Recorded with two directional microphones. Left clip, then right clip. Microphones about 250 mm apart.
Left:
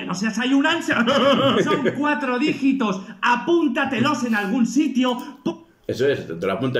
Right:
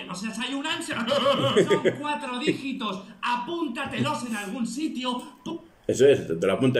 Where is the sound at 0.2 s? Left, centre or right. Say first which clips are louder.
Left 11 dB; left.